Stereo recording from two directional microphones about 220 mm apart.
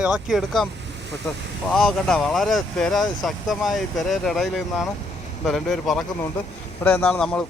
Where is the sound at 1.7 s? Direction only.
Centre (ahead or behind).